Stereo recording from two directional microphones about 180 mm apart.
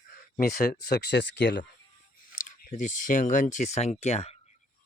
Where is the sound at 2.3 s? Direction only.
45° left (ahead or behind).